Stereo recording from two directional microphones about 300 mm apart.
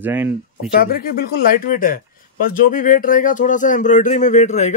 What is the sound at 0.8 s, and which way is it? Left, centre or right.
Speech, left.